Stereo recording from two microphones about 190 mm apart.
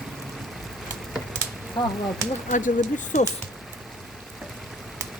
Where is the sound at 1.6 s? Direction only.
Centre (ahead or behind).